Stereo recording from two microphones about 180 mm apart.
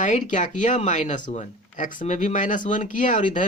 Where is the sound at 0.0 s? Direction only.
45° left (ahead or behind).